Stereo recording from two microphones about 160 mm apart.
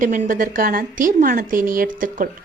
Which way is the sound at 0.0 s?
55° right (ahead or behind).